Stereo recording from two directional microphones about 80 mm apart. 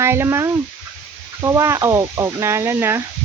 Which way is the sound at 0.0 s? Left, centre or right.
Right.